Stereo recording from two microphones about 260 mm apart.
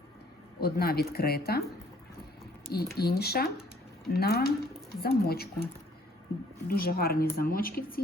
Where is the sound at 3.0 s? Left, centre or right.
Left.